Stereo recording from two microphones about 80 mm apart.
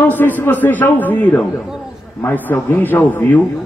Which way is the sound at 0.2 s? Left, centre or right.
Left.